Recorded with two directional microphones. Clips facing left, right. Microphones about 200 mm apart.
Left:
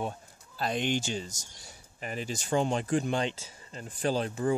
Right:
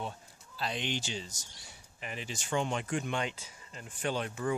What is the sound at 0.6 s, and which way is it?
Speech, 50° left (ahead or behind).